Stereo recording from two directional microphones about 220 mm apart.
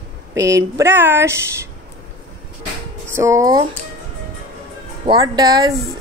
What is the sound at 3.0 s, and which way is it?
Speech, 10° right (ahead or behind).